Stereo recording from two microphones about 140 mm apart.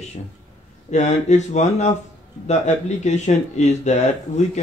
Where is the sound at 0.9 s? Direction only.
55° left (ahead or behind).